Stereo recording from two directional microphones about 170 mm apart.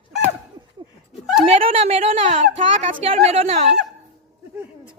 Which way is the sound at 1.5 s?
35° right (ahead or behind).